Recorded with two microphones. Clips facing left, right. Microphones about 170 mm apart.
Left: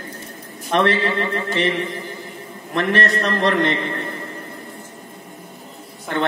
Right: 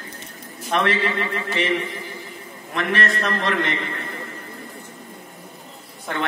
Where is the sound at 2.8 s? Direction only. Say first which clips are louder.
Left 3 dB; 35° left (ahead or behind).